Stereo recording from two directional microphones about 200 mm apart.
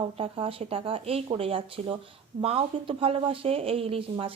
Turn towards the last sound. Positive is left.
turn(degrees=-25)  # may be behind; listen again after turning